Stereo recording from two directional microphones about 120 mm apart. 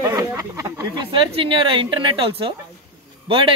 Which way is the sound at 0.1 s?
30° right (ahead or behind).